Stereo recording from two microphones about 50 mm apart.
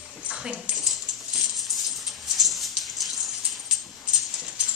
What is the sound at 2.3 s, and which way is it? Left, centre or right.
Dog, centre.